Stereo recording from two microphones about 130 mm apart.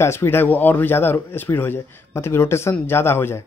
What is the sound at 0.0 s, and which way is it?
Speech, 20° left (ahead or behind).